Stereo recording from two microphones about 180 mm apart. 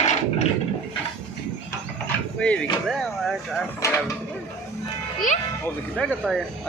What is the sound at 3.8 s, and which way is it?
Mechanisms, 15° left (ahead or behind).